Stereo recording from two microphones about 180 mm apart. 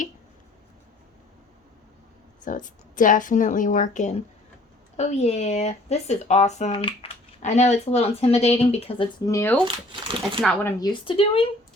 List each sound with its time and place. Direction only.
2.4 s speech: 45° left (ahead or behind)
9.2 s speech: 15° left (ahead or behind)
9.6 s speech: 30° right (ahead or behind)
10.4 s speech: 10° left (ahead or behind); by 11.4 s 30° left (ahead or behind)